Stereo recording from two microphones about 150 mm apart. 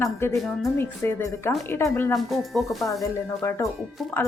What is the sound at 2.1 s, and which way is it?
Speech, centre (ahead or behind).